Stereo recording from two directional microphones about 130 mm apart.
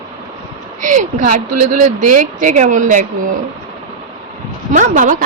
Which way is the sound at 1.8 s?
85° right.